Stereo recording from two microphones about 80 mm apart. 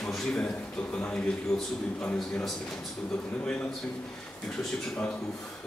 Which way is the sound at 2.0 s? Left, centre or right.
Centre.